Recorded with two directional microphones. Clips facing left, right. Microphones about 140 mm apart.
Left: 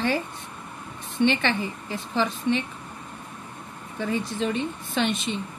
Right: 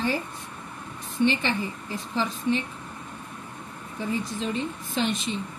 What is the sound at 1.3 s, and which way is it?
Speech, 70° left (ahead or behind).